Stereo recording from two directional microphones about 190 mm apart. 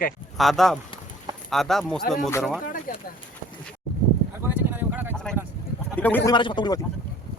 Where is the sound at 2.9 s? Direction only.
50° left (ahead or behind).